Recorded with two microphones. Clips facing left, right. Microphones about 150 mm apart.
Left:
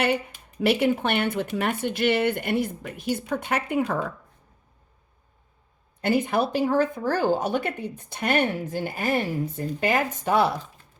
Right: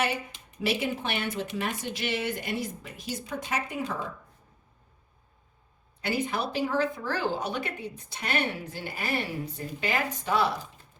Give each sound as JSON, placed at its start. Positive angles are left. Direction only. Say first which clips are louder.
{"t": 0.6, "sound": "speech", "louder": "left 8 dB", "side_deg": 55}
{"t": 6.0, "sound": "speech", "louder": "left 7 dB", "side_deg": 50}